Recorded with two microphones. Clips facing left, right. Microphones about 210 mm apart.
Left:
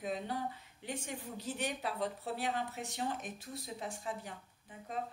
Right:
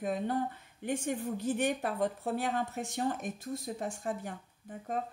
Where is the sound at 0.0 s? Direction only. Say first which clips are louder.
Right 6 dB; 50° right (ahead or behind).